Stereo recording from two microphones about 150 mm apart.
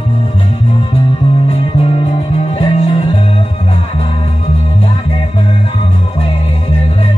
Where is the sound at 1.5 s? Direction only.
40° left (ahead or behind).